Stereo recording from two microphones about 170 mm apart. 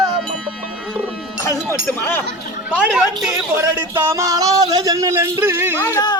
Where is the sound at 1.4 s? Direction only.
15° left (ahead or behind).